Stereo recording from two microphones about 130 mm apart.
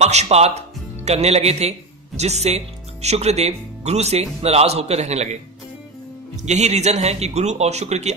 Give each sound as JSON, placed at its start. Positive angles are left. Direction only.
{"t": 0.0, "sound": "speech", "side_deg": -55}